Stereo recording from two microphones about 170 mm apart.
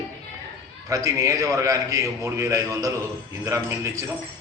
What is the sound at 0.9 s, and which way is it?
A man's voice, 20° right (ahead or behind).